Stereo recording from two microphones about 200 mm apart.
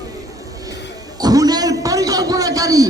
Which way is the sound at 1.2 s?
20° right (ahead or behind).